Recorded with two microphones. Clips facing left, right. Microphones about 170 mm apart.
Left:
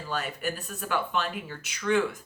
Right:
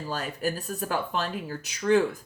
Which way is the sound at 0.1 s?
35° right (ahead or behind).